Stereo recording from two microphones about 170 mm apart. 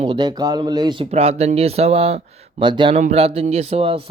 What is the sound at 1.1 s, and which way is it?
Speech, 40° right (ahead or behind).